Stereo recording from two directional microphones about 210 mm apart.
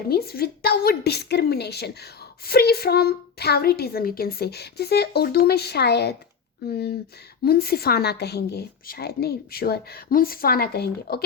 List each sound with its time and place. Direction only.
0.1 s a woman's voice: 45° left (ahead or behind)